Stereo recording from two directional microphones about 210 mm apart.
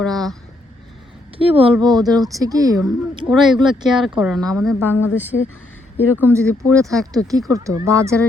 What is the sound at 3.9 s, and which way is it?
Speech, centre (ahead or behind).